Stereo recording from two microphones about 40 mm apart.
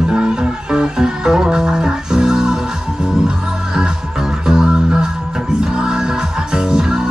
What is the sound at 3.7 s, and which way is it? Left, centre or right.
Music, centre.